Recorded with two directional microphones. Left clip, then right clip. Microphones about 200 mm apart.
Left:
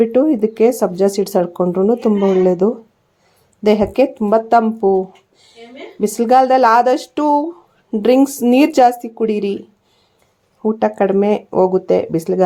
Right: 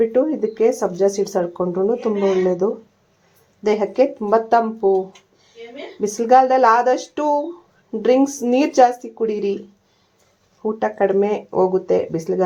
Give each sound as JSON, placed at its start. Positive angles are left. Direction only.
{"t": 0.0, "sound": "speech", "side_deg": 30}
{"t": 6.1, "sound": "speech", "side_deg": 25}
{"t": 10.6, "sound": "speech", "side_deg": 25}